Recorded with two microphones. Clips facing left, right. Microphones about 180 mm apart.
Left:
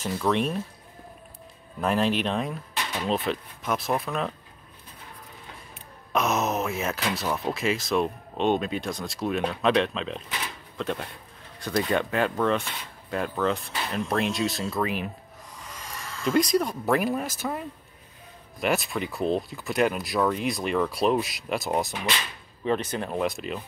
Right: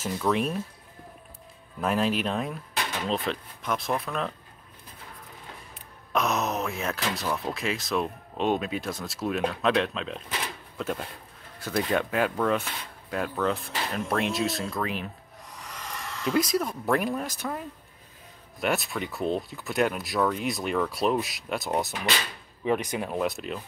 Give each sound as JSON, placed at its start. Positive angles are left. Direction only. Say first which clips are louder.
{"t": 0.0, "sound": "speech", "louder": "left 1 dB", "side_deg": -5}
{"t": 1.8, "sound": "speech", "louder": "left 1 dB", "side_deg": 0}
{"t": 6.1, "sound": "speech", "louder": "left 2 dB", "side_deg": 0}
{"t": 15.5, "sound": "a sound", "louder": "right 2 dB", "side_deg": -65}
{"t": 16.3, "sound": "speech", "louder": "left 3 dB", "side_deg": -5}
{"t": 22.7, "sound": "speech", "louder": "even", "side_deg": -15}
{"t": 23.1, "sound": "speech", "louder": "left 2 dB", "side_deg": 0}